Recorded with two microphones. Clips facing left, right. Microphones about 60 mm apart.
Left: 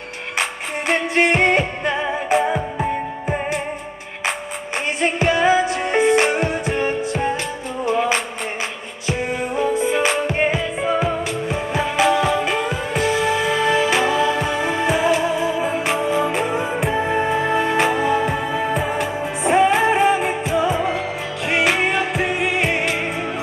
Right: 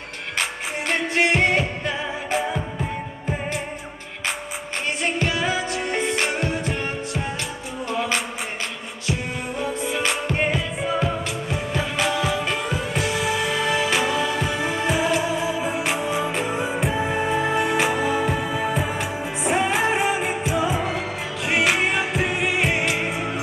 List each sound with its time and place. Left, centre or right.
0.4 s music: centre
2.4 s music: left
5.9 s music: centre
9.6 s music: centre